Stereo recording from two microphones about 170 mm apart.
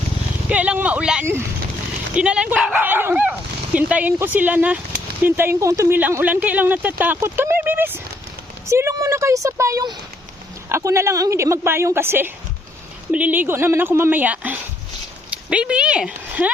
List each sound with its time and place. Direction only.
0.4 s speech: 5° right (ahead or behind)